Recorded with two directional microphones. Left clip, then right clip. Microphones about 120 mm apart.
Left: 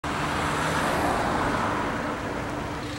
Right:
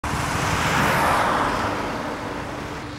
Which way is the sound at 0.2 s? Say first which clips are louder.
Right 4 dB; 25° right (ahead or behind).